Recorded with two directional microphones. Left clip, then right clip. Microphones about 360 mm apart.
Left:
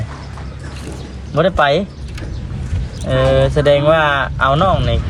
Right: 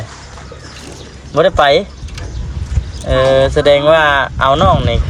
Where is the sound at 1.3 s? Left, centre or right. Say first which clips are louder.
Right 4 dB; right.